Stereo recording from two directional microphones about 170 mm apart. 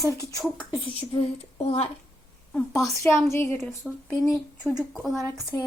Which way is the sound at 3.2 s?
10° left (ahead or behind).